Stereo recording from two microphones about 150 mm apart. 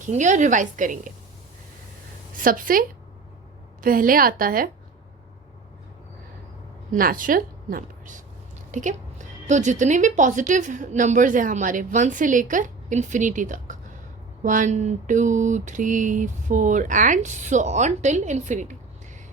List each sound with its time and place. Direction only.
0.0 s a woman's voice: 55° right (ahead or behind)
2.4 s a woman's voice: 65° right (ahead or behind)
6.9 s a woman's voice: 65° right (ahead or behind)